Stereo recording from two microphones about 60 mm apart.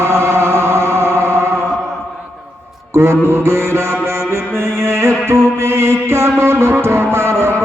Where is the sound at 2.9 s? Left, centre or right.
Right.